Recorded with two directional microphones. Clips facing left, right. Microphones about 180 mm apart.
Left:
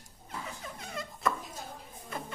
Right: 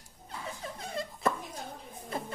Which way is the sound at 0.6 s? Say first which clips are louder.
Right 4 dB; 30° right (ahead or behind).